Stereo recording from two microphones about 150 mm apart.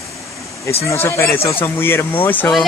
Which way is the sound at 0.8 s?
20° left (ahead or behind).